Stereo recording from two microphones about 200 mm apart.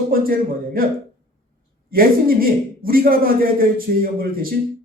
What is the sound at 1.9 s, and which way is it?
Speech, 45° right (ahead or behind).